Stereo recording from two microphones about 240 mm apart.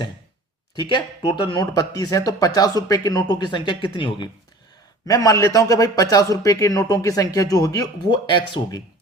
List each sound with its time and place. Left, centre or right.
0.8 s a man's voice: centre